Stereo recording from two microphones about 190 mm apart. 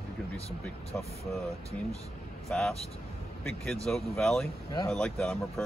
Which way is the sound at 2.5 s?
5° left (ahead or behind).